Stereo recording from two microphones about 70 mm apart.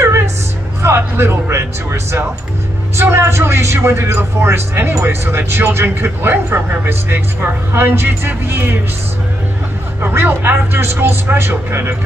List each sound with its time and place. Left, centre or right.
0.8 s speech: right
10.0 s speech: right